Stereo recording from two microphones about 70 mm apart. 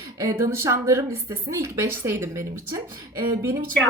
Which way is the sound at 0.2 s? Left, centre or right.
Right.